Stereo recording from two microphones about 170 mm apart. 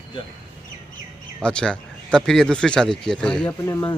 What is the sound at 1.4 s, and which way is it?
Speech, 5° left (ahead or behind).